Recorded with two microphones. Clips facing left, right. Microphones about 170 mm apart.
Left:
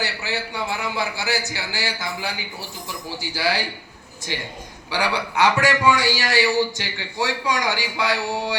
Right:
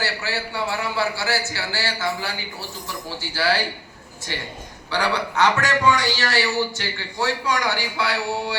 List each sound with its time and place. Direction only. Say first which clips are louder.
0.0 s a man's voice: even; 15° left (ahead or behind)